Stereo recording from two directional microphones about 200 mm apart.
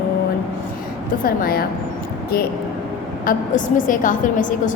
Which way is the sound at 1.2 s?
45° left (ahead or behind).